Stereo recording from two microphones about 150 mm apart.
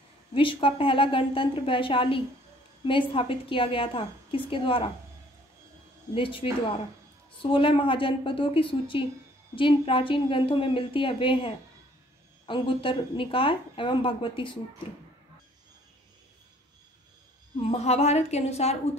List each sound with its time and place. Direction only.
0.3 s a woman's voice: 35° left (ahead or behind)
6.1 s a woman's voice: 35° left (ahead or behind)
17.6 s a woman's voice: 45° left (ahead or behind)